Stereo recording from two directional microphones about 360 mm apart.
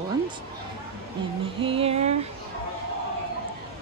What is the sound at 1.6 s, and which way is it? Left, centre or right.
Speech, centre.